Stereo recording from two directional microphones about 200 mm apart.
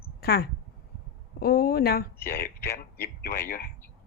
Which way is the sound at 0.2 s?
50° left (ahead or behind).